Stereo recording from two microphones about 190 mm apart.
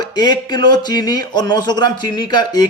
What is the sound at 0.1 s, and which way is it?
Speech, 20° left (ahead or behind).